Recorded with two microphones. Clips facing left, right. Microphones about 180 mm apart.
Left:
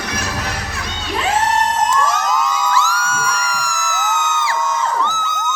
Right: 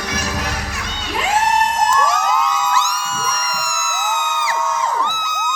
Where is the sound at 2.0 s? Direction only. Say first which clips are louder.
Even; centre (ahead or behind).